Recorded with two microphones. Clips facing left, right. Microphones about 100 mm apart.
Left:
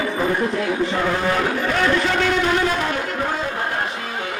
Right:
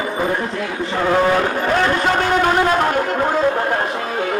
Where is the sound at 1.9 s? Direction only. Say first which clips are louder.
Right 3 dB; 40° right (ahead or behind).